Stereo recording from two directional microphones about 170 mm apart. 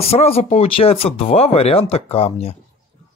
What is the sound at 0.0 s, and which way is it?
Speech, 35° left (ahead or behind).